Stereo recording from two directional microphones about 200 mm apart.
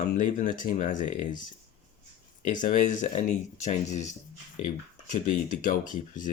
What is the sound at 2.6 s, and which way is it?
Speech, 40° left (ahead or behind).